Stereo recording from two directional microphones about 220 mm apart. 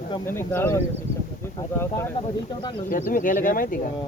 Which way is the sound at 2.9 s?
40° left (ahead or behind).